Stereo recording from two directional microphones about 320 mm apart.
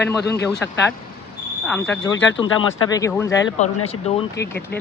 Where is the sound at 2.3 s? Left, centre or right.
Centre.